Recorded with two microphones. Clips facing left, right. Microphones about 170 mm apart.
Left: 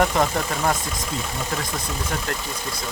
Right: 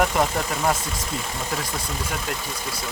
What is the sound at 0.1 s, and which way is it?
Speech, 5° right (ahead or behind).